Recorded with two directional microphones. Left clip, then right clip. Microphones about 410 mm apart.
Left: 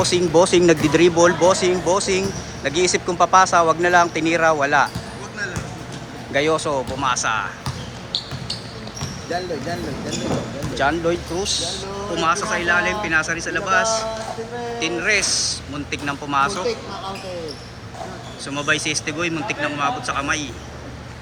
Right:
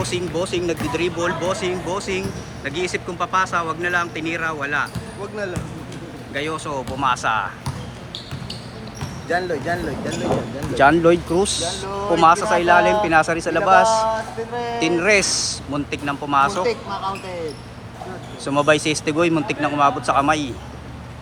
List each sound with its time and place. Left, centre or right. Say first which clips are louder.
0.0 s speech: left 8 dB; centre
6.3 s speech: left 6 dB; centre
10.8 s speech: right 6 dB; centre
15.9 s speech: right 1 dB; centre
18.4 s speech: right 4 dB; centre